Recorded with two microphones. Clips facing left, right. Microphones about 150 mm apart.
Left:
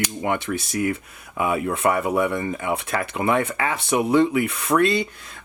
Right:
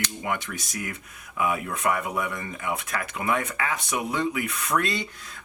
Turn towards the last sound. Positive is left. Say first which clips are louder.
# left 7 dB
turn(degrees=30)  # may be behind; listen again after turning